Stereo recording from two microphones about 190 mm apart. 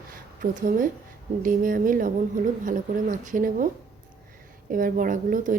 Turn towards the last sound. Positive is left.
turn(degrees=-45)  # may be behind; listen again after turning